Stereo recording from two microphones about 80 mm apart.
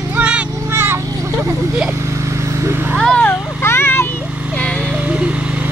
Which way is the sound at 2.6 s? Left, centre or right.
Right.